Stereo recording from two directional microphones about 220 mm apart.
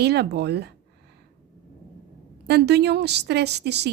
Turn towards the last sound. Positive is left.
turn(degrees=-50)  # may be behind; listen again after turning